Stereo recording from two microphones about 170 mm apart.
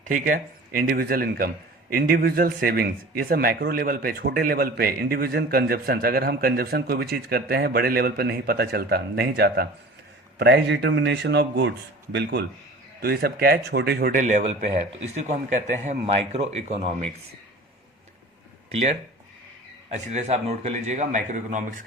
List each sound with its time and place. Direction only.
0.0 s speech: 55° right (ahead or behind); by 9.6 s 70° right (ahead or behind)
10.3 s speech: 85° right
13.0 s speech: 65° right (ahead or behind)
14.2 s a man's voice: 45° right (ahead or behind)
18.7 s a man's voice: 40° right (ahead or behind)